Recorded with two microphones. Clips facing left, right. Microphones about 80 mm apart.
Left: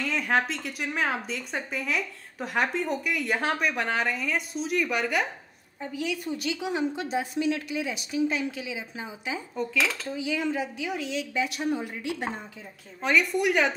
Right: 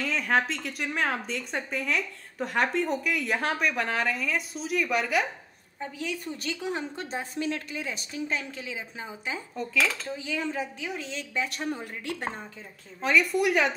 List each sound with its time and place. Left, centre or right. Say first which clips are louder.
0.0 s a woman's voice: even; centre
6.7 s a woman's voice: left 5 dB; right
9.6 s a woman's voice: even; centre
10.1 s a woman's voice: left 3 dB; right
13.0 s a woman's voice: even; centre